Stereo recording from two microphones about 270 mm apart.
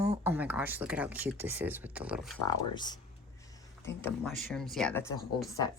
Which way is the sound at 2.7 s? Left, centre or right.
Centre.